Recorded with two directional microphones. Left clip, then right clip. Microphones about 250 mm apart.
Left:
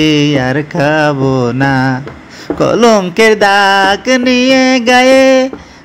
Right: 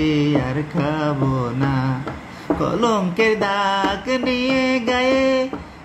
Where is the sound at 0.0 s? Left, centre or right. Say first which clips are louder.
Left 9 dB; left.